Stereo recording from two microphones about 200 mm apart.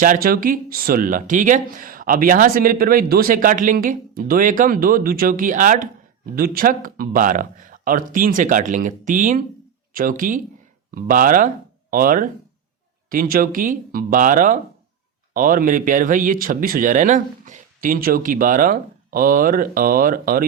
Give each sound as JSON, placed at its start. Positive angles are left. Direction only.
{"t": 0.0, "sound": "speech", "side_deg": -45}